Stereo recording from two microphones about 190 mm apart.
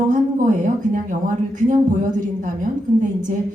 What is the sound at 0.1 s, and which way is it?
A woman's voice, 45° right (ahead or behind).